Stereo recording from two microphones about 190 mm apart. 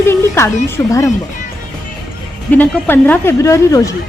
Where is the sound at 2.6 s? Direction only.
10° left (ahead or behind).